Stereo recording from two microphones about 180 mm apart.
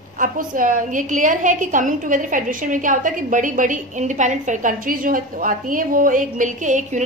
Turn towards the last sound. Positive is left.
turn(degrees=-45)  # may be behind; listen again after turning